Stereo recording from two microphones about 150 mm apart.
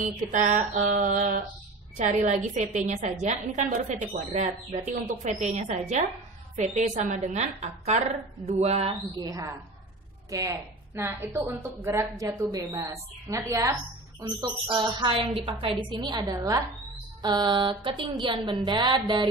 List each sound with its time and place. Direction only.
0.0 s a woman's voice: 55° right (ahead or behind)
9.1 s a woman's voice: 25° right (ahead or behind)